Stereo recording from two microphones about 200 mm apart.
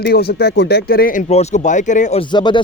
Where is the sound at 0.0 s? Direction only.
50° left (ahead or behind).